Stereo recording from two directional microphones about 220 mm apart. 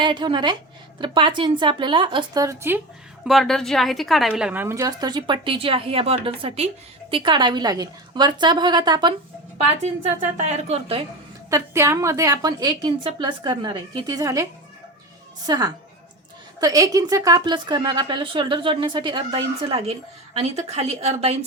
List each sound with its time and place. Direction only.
0.0 s a woman's voice: 20° right (ahead or behind)
3.2 s a woman's voice: centre (ahead or behind); by 9.1 s 20° right (ahead or behind)
10.3 s a woman's voice: 30° right (ahead or behind)
11.5 s a woman's voice: 10° right (ahead or behind)
15.4 s a woman's voice: 20° right (ahead or behind)